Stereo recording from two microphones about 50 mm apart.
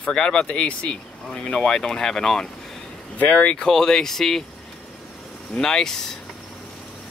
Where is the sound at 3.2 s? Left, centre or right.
Left.